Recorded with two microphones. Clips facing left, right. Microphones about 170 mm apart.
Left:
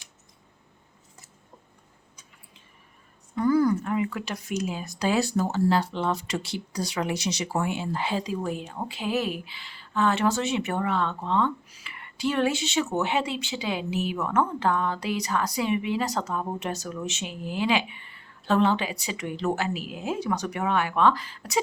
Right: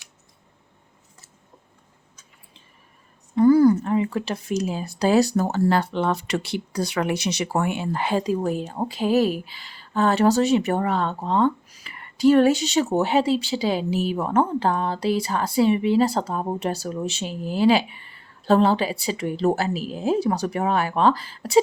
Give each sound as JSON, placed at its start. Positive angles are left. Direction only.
{"t": 3.3, "sound": "speech", "side_deg": -30}